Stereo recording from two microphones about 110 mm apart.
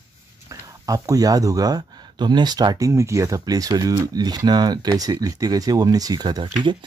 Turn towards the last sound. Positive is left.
turn(degrees=-40)  # may be behind; listen again after turning